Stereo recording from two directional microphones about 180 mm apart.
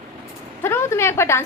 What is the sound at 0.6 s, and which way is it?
Speech, 15° left (ahead or behind).